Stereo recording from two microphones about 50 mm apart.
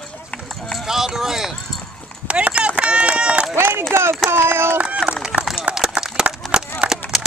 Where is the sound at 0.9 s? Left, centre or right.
Centre.